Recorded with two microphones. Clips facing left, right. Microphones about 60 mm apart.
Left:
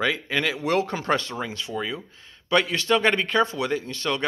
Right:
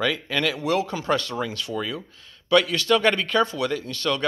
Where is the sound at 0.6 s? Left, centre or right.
Left.